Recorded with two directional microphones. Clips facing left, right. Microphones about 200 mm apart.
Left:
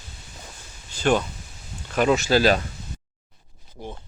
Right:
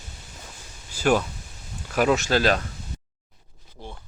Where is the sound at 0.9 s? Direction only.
5° right (ahead or behind).